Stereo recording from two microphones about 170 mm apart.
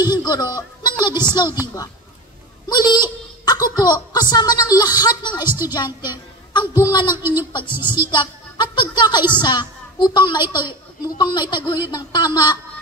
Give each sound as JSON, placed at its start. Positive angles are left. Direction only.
{"t": 0.0, "sound": "a woman's voice", "side_deg": 25}
{"t": 2.7, "sound": "a sound", "side_deg": 25}
{"t": 3.7, "sound": "a woman's voice", "side_deg": 25}